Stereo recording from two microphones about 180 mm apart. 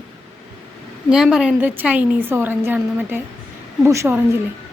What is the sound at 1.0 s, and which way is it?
A woman's voice, 5° right (ahead or behind).